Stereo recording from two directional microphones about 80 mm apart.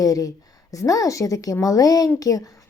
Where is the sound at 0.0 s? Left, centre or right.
Left.